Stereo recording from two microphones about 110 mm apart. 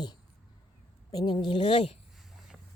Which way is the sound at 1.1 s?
35° left (ahead or behind).